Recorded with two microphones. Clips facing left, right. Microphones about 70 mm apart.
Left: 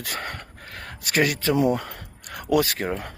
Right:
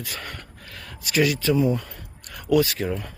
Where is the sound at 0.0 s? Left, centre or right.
Left.